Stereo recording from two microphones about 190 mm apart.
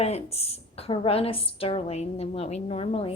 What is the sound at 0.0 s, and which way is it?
A woman's voice, 35° left (ahead or behind).